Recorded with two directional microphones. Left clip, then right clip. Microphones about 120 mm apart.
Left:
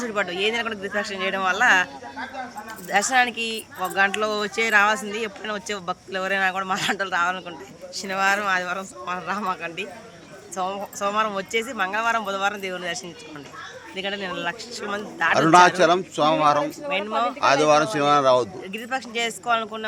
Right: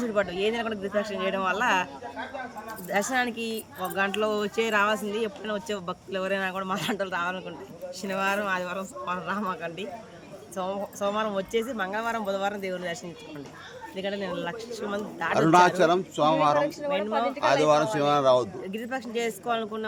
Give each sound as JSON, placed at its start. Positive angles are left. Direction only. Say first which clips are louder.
{"t": 0.0, "sound": "speech", "louder": "left 2 dB", "side_deg": -20}
{"t": 2.9, "sound": "speech", "louder": "left 7 dB", "side_deg": -15}
{"t": 15.4, "sound": "a man's voice", "louder": "left 4 dB", "side_deg": 15}
{"t": 18.7, "sound": "speech", "louder": "left 4 dB", "side_deg": -25}